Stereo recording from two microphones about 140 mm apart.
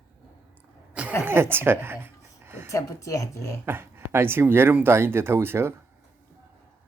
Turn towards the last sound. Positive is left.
turn(degrees=-15)  # may be behind; listen again after turning